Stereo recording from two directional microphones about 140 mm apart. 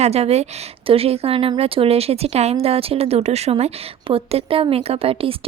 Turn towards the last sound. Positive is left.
turn(degrees=-45)  # may be behind; listen again after turning